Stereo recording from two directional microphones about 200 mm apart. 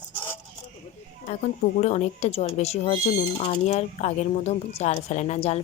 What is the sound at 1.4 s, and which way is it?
Speech, 35° left (ahead or behind).